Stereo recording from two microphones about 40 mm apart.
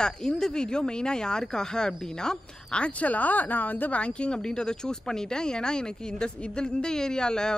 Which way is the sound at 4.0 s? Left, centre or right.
Left.